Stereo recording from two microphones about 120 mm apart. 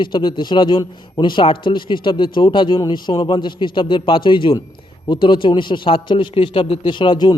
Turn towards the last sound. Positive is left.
turn(degrees=40)  # may be behind; listen again after turning